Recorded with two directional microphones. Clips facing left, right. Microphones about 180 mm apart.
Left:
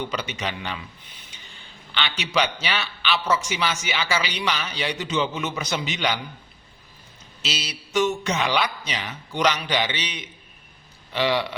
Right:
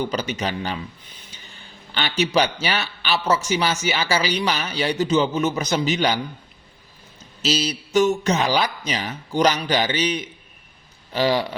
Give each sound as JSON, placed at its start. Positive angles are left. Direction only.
{"t": 0.0, "sound": "a man's voice", "side_deg": -40}
{"t": 1.9, "sound": "a man's voice", "side_deg": -40}
{"t": 7.4, "sound": "a man's voice", "side_deg": -40}